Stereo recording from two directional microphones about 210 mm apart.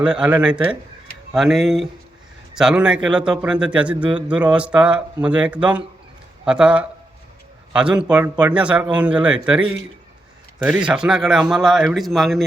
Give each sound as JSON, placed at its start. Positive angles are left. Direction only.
{"t": 0.0, "sound": "a man's voice", "side_deg": -5}